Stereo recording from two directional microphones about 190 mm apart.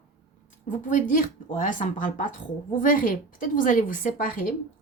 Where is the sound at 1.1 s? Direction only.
45° left (ahead or behind).